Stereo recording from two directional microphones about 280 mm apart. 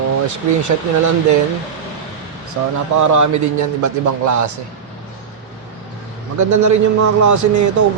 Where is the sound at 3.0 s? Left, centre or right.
Right.